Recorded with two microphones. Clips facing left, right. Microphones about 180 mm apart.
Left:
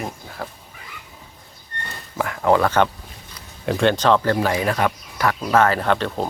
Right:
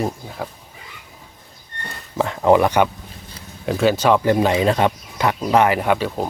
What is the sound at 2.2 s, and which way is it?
Speech, 20° right (ahead or behind).